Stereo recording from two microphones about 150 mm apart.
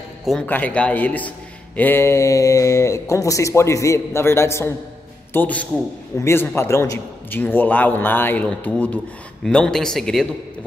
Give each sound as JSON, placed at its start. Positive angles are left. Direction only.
{"t": 0.2, "sound": "a man's voice", "side_deg": 0}